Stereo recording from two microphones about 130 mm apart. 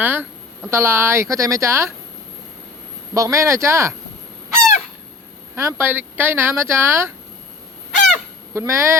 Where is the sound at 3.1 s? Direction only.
25° right (ahead or behind).